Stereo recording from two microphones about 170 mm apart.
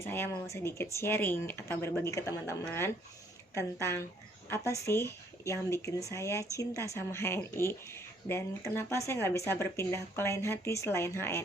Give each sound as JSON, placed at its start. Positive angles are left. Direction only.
{"t": 0.0, "sound": "speech", "side_deg": 15}